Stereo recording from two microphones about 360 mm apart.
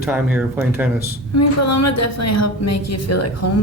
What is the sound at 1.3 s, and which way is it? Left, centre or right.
A woman's voice, left.